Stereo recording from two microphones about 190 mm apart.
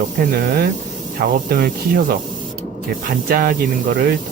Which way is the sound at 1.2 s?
50° right (ahead or behind).